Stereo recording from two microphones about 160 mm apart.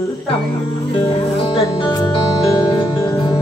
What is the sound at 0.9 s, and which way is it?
Music, 35° left (ahead or behind).